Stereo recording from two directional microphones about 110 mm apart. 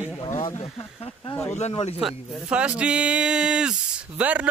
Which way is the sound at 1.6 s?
70° left (ahead or behind).